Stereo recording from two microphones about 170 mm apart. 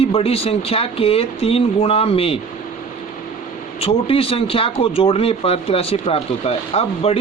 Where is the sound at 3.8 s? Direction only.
35° left (ahead or behind).